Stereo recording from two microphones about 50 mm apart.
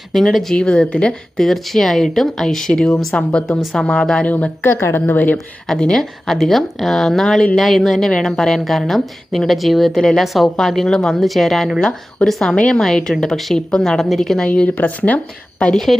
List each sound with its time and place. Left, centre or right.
0.1 s speech: centre
0.5 s speech: centre
1.4 s a woman's voice: centre
4.3 s speech: left
4.6 s a woman's voice: left
5.6 s speech: centre
11.8 s a woman's voice: centre
14.4 s speech: left
15.7 s a woman's voice: centre